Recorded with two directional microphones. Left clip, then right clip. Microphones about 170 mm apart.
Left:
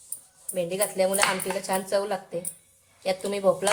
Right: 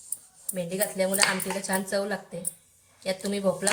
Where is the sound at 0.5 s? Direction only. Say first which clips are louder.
Left 3 dB; 40° left (ahead or behind).